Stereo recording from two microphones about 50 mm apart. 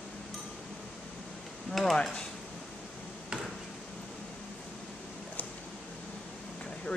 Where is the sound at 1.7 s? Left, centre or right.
Centre.